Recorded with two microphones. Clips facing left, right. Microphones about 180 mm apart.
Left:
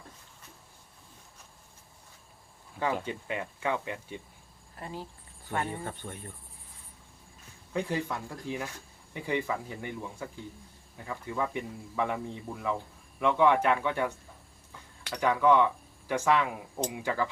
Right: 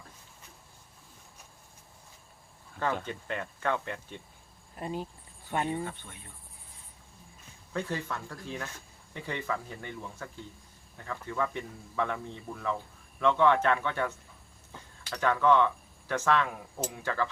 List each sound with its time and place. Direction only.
2.7 s speech: 10° left (ahead or behind)
4.8 s speech: 20° right (ahead or behind)
5.8 s cricket: 45° left (ahead or behind)
7.7 s speech: 15° left (ahead or behind)
15.1 s speech: 10° left (ahead or behind)